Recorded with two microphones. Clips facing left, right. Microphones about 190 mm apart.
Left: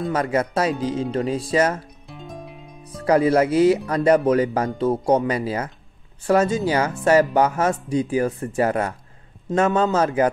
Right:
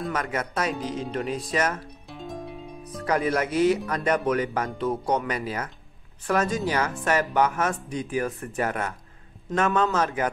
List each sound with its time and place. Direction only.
0.1 s speech: 30° left (ahead or behind)
2.0 s music: centre (ahead or behind)
3.1 s speech: 30° left (ahead or behind)
9.9 s speech: 30° left (ahead or behind)